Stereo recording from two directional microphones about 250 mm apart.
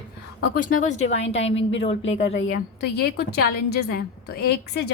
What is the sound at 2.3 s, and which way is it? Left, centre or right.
Speech, left.